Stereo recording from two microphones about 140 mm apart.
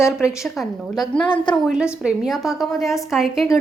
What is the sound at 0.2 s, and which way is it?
A woman's voice, 5° right (ahead or behind).